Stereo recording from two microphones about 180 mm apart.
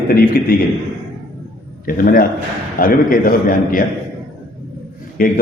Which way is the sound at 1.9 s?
50° left (ahead or behind).